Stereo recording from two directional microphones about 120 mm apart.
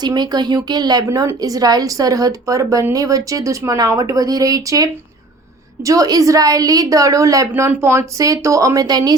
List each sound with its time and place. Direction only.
0.0 s a woman's voice: 35° right (ahead or behind)